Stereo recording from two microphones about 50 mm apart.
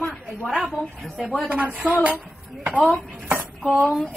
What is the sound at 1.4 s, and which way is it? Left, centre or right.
Speech, right.